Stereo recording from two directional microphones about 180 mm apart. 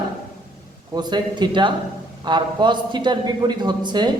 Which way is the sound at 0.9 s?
25° right (ahead or behind).